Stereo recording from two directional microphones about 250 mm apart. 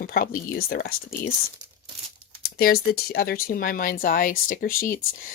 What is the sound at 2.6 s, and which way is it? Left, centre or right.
Speech, left.